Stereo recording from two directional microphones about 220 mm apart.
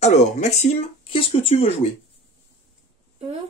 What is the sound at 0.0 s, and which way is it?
Speech, 30° left (ahead or behind).